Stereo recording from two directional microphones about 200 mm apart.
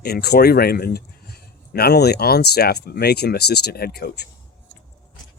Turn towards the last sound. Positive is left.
turn(degrees=55)  # may be behind; listen again after turning